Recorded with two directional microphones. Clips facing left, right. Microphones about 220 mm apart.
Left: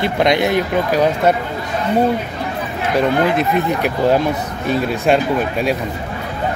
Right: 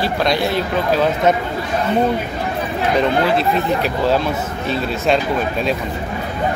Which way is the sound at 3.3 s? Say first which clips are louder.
Even; 15° left (ahead or behind).